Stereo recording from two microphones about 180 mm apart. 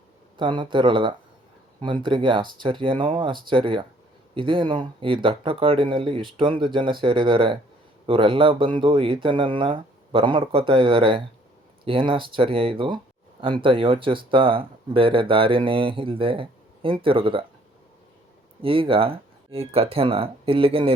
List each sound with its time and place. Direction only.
0.3 s speech: 25° right (ahead or behind)
18.6 s speech: 30° right (ahead or behind)